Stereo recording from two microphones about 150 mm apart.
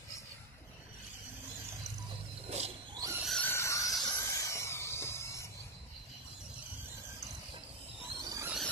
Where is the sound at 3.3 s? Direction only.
10° left (ahead or behind).